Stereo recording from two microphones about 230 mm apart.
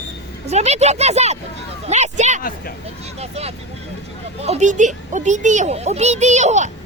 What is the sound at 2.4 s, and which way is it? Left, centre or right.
Speech, left.